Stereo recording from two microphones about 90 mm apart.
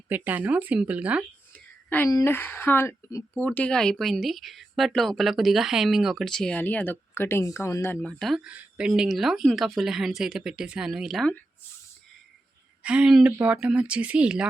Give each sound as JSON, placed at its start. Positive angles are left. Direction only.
{"t": 0.1, "sound": "speech", "side_deg": -20}
{"t": 2.2, "sound": "speech", "side_deg": 25}
{"t": 6.2, "sound": "speech", "side_deg": 5}
{"t": 6.6, "sound": "speech", "side_deg": 20}
{"t": 8.0, "sound": "speech", "side_deg": 0}
{"t": 8.4, "sound": "speech", "side_deg": -10}
{"t": 12.8, "sound": "speech", "side_deg": -10}
{"t": 13.2, "sound": "speech", "side_deg": -15}